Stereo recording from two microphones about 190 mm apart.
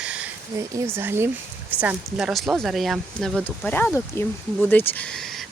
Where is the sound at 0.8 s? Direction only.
10° right (ahead or behind).